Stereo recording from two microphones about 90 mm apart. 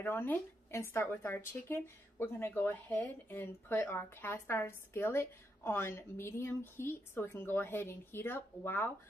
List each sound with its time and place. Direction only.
0.0 s speech: 25° left (ahead or behind)